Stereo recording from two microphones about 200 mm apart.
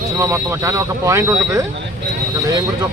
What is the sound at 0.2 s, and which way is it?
Speech, 15° right (ahead or behind).